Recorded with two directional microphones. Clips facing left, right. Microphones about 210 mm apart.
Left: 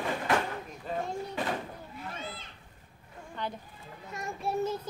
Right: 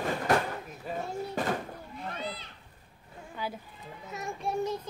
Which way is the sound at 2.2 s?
50° left (ahead or behind).